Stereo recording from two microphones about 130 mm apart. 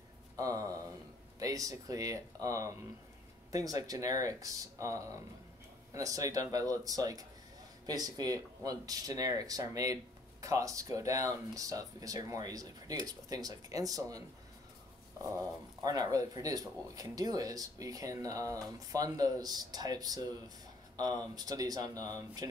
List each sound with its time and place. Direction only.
0.4 s speech: 25° right (ahead or behind)
15.2 s speech: 25° right (ahead or behind)